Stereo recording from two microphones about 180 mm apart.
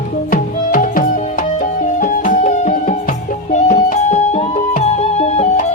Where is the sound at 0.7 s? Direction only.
50° left (ahead or behind).